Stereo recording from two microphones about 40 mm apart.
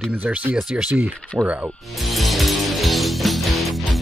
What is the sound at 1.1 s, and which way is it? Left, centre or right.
Speech, left.